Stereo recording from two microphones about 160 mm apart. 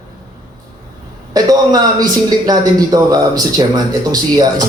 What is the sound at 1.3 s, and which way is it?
A woman's voice, 25° right (ahead or behind).